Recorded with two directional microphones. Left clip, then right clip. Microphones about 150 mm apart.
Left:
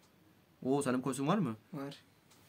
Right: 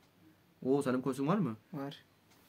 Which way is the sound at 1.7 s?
10° right (ahead or behind).